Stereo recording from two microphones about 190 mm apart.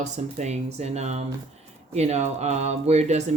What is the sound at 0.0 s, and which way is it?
Speech, 35° right (ahead or behind).